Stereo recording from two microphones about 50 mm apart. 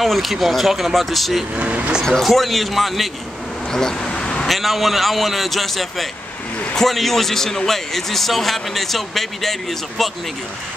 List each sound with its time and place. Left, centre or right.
0.0 s a man's voice: centre
1.6 s speech: right
2.2 s a man's voice: centre
3.7 s a sound: centre
4.5 s a man's voice: centre